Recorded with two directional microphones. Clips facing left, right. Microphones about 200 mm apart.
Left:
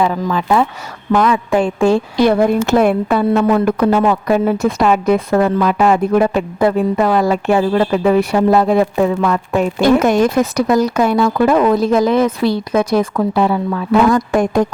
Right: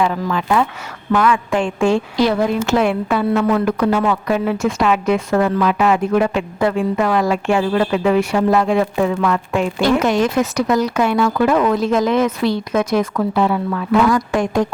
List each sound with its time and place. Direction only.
0.0 s a woman's voice: 30° left (ahead or behind)
2.1 s a woman's voice: 55° left (ahead or behind); by 14.1 s 30° left (ahead or behind)
14.1 s a woman's voice: 55° left (ahead or behind)